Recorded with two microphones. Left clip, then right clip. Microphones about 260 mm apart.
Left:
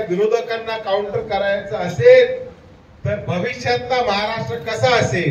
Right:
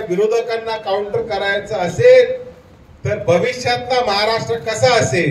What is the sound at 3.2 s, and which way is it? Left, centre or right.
A man's voice, right.